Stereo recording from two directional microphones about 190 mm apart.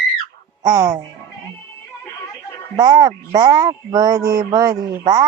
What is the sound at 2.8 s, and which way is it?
Speech, 20° right (ahead or behind).